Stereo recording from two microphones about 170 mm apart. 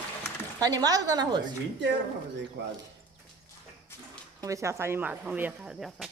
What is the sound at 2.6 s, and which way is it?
Speech, 90° right.